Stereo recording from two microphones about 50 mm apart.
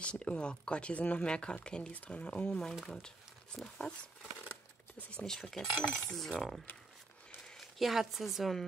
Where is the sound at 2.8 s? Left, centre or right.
Centre.